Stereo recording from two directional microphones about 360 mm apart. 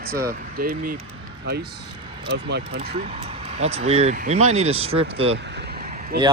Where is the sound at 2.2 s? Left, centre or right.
Right.